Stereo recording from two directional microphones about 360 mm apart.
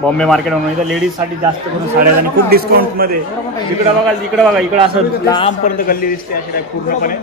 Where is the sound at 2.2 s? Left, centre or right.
Right.